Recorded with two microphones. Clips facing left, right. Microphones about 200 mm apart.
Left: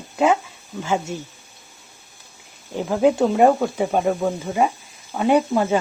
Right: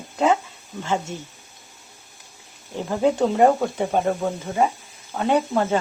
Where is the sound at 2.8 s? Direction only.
5° left (ahead or behind).